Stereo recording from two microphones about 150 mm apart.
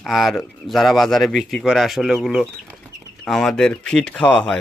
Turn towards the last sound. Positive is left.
turn(degrees=5)  # may be behind; listen again after turning